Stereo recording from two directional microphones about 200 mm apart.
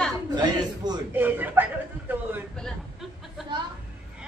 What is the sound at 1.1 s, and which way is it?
Speech, 10° right (ahead or behind).